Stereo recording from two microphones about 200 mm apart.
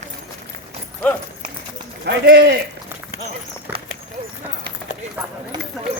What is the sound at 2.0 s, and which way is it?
Speech, 55° right (ahead or behind).